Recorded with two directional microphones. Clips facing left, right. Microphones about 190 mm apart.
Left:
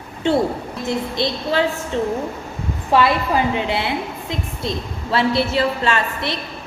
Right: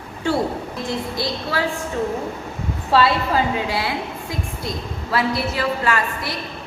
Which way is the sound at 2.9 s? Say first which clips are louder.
Left 1 dB; 20° left (ahead or behind).